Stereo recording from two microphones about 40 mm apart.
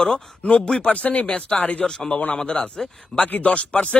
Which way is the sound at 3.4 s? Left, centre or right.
Left.